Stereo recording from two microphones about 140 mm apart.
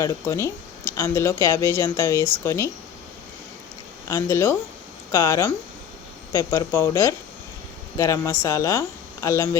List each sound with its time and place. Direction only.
0.0 s speech: 20° left (ahead or behind)
4.1 s speech: 20° left (ahead or behind)